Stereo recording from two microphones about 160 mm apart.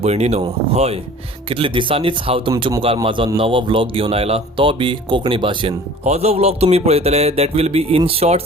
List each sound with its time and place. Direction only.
0.0 s speech: 40° right (ahead or behind)